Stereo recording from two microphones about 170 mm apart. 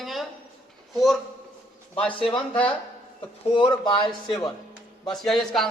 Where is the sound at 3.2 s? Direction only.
30° left (ahead or behind).